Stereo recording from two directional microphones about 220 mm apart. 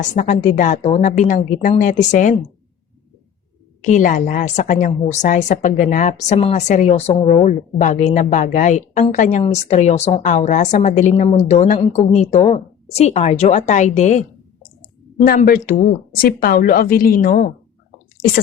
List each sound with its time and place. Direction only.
0.0 s a woman's voice: 35° left (ahead or behind)
3.8 s a woman's voice: 35° left (ahead or behind)